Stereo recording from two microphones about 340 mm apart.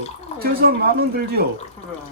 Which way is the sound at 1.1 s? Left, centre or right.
Right.